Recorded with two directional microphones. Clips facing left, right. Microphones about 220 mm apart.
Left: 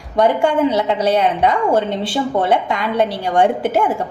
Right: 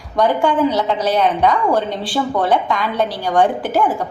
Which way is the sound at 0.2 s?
25° left (ahead or behind).